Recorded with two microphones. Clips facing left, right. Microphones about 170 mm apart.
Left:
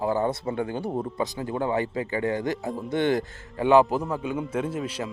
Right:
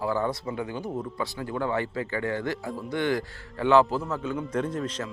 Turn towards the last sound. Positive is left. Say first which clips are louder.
# left 1 dB
turn(degrees=10)  # may be behind; listen again after turning